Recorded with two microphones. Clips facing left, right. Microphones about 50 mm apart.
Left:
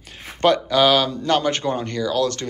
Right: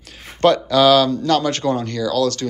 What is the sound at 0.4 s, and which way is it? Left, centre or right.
Speech, centre.